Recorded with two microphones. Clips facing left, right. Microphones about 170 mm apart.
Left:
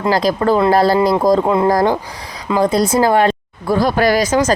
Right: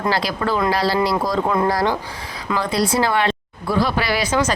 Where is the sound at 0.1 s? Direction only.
45° left (ahead or behind).